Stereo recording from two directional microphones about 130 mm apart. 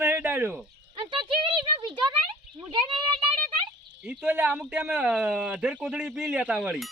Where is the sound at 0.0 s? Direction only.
15° right (ahead or behind).